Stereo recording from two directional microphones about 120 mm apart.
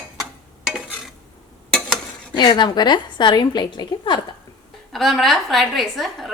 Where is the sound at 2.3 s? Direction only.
40° left (ahead or behind).